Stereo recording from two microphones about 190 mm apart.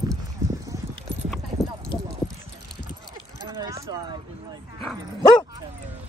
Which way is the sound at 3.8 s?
20° right (ahead or behind).